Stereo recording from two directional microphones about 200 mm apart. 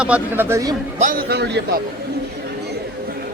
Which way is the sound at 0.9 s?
45° right (ahead or behind).